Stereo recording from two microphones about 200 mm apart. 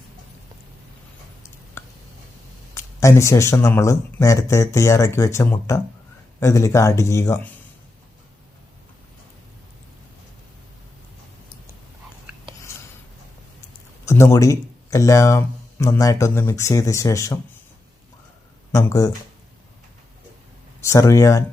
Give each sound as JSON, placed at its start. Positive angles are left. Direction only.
{"t": 1.8, "sound": "a sound", "side_deg": 15}
{"t": 2.7, "sound": "speech", "side_deg": 15}
{"t": 12.7, "sound": "writing", "side_deg": 15}
{"t": 14.0, "sound": "speech", "side_deg": 15}
{"t": 18.7, "sound": "speech", "side_deg": 15}
{"t": 20.8, "sound": "speech", "side_deg": 15}